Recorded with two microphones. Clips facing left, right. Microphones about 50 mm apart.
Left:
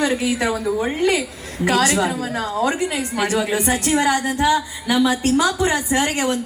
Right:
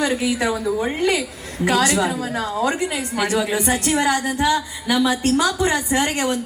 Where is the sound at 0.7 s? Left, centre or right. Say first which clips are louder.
Left 2 dB; centre.